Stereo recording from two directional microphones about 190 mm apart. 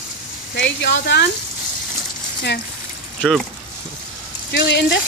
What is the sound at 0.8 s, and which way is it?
Speech, 65° left (ahead or behind).